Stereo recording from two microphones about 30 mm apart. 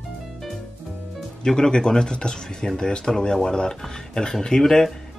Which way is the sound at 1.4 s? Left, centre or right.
Left.